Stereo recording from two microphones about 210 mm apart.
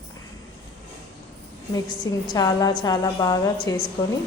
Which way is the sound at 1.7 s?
20° left (ahead or behind).